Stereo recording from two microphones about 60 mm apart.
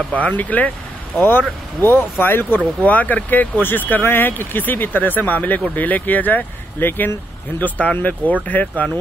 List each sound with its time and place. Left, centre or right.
0.1 s speech: left
1.8 s speech: left